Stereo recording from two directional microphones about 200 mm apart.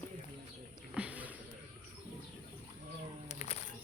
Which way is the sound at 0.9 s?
5° right (ahead or behind).